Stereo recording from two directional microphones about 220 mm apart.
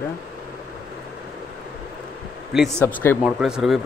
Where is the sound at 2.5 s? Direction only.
Centre (ahead or behind).